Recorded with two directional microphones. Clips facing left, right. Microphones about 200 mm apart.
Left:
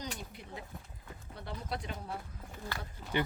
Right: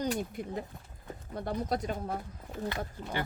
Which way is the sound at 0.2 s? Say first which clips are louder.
Right 10 dB; 50° right (ahead or behind).